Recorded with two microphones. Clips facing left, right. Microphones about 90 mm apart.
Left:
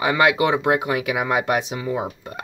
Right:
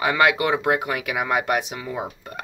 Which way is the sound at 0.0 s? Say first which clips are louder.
Left 1 dB; 5° left (ahead or behind).